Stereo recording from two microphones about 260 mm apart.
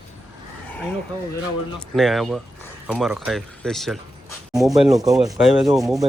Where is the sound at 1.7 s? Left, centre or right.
Centre.